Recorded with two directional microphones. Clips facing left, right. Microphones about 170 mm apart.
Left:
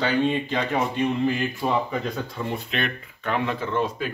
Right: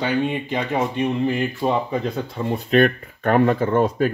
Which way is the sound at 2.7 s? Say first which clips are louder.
Right 12 dB; 45° right (ahead or behind).